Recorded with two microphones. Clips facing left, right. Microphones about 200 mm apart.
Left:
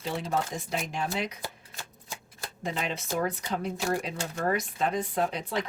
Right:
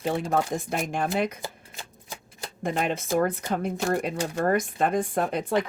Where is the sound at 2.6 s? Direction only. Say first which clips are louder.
Right 6 dB; 50° right (ahead or behind).